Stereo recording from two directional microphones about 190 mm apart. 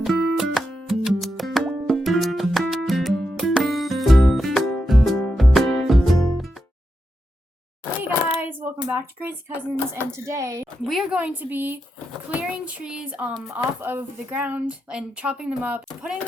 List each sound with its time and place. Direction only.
0.0 s music: centre (ahead or behind)
8.0 s a sound: 10° right (ahead or behind)
9.9 s speech: 15° right (ahead or behind)
10.8 s speech: centre (ahead or behind)